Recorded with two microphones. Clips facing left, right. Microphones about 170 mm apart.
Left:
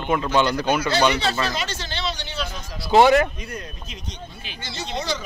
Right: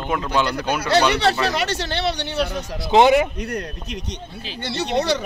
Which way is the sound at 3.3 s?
70° right (ahead or behind).